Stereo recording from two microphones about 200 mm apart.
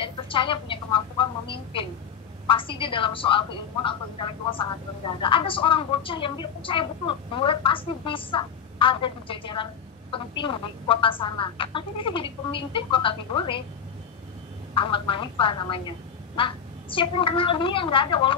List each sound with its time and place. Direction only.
0.0 s a sound: 25° left (ahead or behind)
2.4 s a woman's voice: 25° left (ahead or behind)
14.7 s a woman's voice: 25° left (ahead or behind)